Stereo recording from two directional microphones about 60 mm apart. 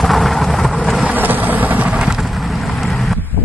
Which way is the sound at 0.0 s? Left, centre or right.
Centre.